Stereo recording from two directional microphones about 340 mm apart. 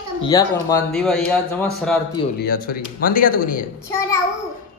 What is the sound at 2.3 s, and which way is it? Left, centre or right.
Speech, left.